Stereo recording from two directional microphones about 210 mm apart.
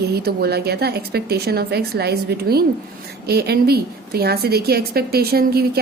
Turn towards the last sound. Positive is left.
turn(degrees=-45)  # may be behind; listen again after turning